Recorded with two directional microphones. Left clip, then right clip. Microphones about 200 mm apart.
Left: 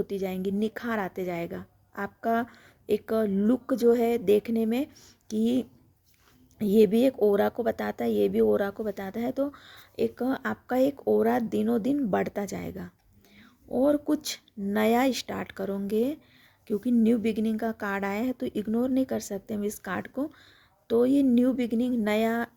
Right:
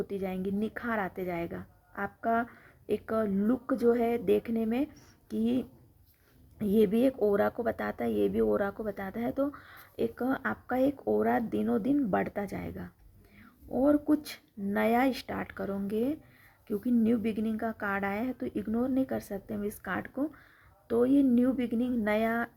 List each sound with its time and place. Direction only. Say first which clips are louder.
0.0 s speech: left 4 dB; 40° left (ahead or behind)